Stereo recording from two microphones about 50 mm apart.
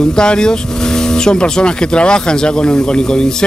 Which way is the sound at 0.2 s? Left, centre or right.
Centre.